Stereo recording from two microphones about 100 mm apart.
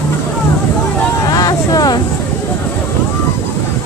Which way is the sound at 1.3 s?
40° left (ahead or behind).